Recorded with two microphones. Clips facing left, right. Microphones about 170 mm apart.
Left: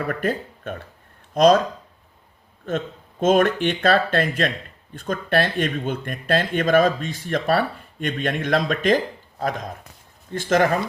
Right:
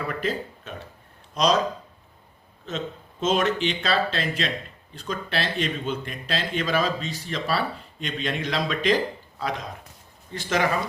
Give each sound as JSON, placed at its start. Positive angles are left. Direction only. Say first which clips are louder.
{"t": 0.1, "sound": "speech", "louder": "left 4 dB", "side_deg": 55}
{"t": 2.6, "sound": "speech", "louder": "left 5 dB", "side_deg": 55}